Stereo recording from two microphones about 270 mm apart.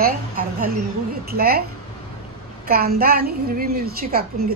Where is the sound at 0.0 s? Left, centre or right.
Right.